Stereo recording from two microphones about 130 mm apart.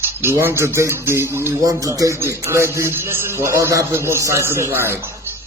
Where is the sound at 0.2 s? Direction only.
15° right (ahead or behind).